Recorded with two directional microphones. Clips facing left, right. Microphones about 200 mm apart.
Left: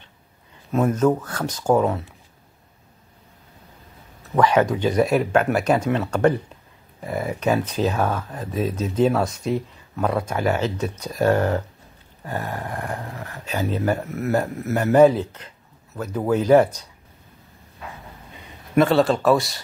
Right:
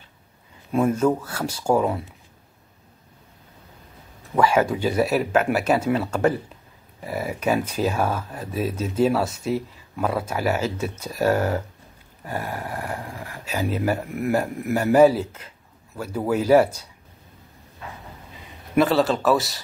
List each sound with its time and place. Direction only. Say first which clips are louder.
0.7 s speech: left 1 dB; 10° right (ahead or behind)
4.4 s speech: left 1 dB; 10° right (ahead or behind)
18.8 s speech: left 2 dB; centre (ahead or behind)